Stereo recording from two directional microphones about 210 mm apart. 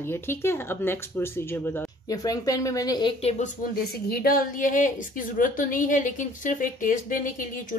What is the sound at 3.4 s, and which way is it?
A woman's voice, 45° left (ahead or behind).